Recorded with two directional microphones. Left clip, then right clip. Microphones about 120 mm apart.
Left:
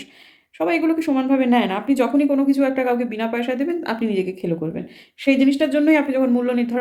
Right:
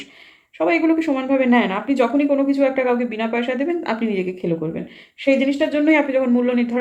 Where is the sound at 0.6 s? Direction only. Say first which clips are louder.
Right 2 dB; 25° left (ahead or behind).